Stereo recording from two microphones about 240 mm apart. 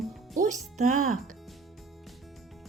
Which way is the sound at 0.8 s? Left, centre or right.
Right.